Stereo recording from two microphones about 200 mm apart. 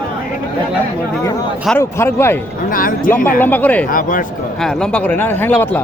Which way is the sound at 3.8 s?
45° left (ahead or behind).